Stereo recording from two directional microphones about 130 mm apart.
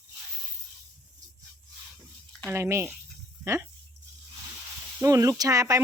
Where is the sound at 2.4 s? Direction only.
20° right (ahead or behind).